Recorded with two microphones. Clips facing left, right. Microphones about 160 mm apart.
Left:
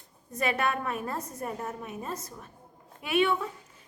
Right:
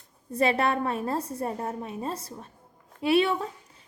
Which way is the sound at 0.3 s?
30° right (ahead or behind).